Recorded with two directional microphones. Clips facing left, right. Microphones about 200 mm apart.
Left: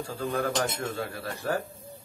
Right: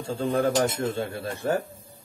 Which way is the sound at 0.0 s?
25° right (ahead or behind).